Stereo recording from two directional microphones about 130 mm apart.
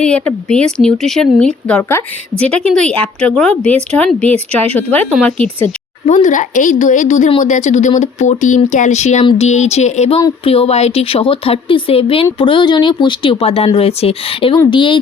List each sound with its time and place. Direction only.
0.0 s speech: 10° left (ahead or behind)
1.9 s a woman's voice: 20° left (ahead or behind)
2.4 s a woman's voice: 10° left (ahead or behind)
6.1 s speech: 70° left (ahead or behind)
10.4 s a woman's voice: 50° left (ahead or behind)